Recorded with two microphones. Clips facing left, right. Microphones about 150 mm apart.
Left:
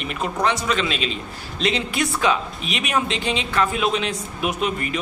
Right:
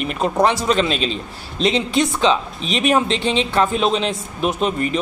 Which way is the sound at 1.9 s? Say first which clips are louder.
Right 4 dB; 25° right (ahead or behind).